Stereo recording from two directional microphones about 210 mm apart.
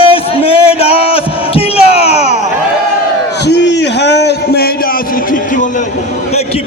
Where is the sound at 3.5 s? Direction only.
55° left (ahead or behind).